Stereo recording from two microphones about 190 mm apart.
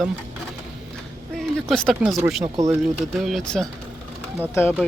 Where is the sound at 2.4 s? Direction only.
20° right (ahead or behind).